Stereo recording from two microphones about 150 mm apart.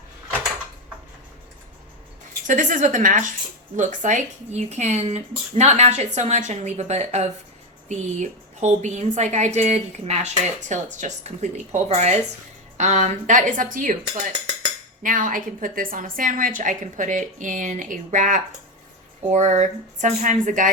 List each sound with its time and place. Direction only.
2.5 s a woman's voice: 60° right (ahead or behind)
15.0 s a woman's voice: 65° right (ahead or behind)